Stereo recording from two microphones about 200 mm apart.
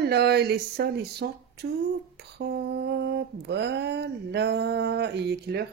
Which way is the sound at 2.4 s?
55° right (ahead or behind).